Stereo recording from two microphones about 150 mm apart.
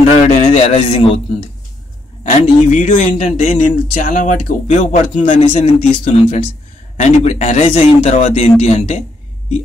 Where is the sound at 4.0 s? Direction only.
60° left (ahead or behind).